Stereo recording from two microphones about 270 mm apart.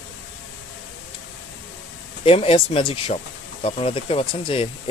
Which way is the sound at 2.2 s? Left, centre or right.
Left.